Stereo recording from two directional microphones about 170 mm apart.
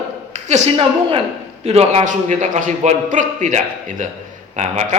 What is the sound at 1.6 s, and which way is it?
A man's voice, 35° right (ahead or behind).